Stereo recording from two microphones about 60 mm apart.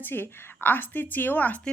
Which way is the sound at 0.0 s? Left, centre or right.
Left.